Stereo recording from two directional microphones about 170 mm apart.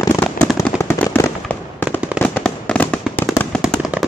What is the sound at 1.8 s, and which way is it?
Fireworks, 5° right (ahead or behind).